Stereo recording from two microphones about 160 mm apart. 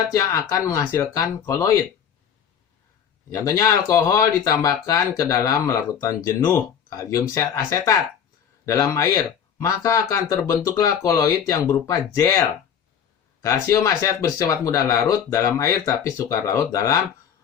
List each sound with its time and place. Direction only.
0.1 s speech: 20° left (ahead or behind)
3.4 s speech: 20° left (ahead or behind)